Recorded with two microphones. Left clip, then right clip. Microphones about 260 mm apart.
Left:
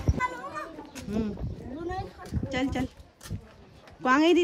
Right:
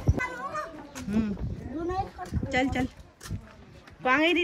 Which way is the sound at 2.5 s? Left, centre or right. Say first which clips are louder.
Right 3 dB; centre.